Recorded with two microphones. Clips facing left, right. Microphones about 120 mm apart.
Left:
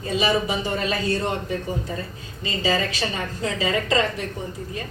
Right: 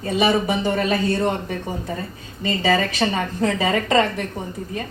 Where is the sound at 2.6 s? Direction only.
55° right (ahead or behind).